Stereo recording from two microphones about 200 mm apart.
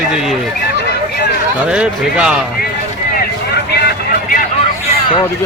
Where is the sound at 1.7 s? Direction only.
5° right (ahead or behind).